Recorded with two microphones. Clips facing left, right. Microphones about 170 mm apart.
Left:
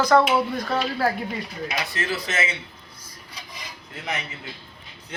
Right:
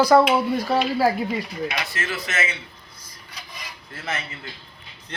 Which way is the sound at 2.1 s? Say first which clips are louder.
Left 1 dB; 30° left (ahead or behind).